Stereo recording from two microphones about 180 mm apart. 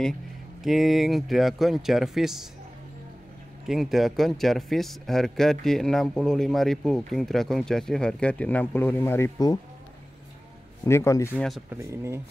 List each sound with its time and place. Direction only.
0.6 s speech: centre (ahead or behind)
3.6 s speech: centre (ahead or behind); by 9.6 s 20° left (ahead or behind)
10.9 s speech: 15° left (ahead or behind)
11.3 s speech: centre (ahead or behind)
11.7 s speech: 15° right (ahead or behind)